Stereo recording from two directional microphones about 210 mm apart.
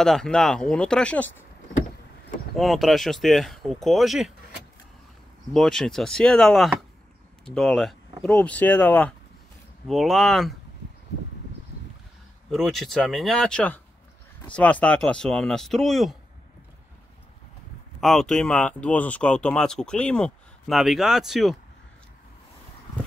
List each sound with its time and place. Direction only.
0.0 s speech: 5° left (ahead or behind)
2.5 s speech: centre (ahead or behind)
5.5 s speech: centre (ahead or behind)
12.4 s speech: centre (ahead or behind)
18.0 s speech: centre (ahead or behind)